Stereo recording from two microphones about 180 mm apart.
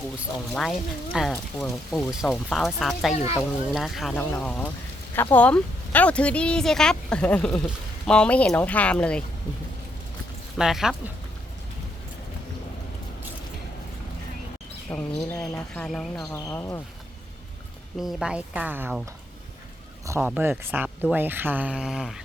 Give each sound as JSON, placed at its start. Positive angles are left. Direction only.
{"t": 0.5, "sound": "speech", "side_deg": 0}
{"t": 10.6, "sound": "speech", "side_deg": 0}
{"t": 14.8, "sound": "speech", "side_deg": 5}
{"t": 16.2, "sound": "speech", "side_deg": 15}
{"t": 18.0, "sound": "speech", "side_deg": 0}
{"t": 20.1, "sound": "speech", "side_deg": -10}